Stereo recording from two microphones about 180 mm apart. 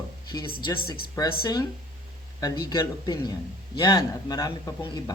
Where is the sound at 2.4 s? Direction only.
20° left (ahead or behind).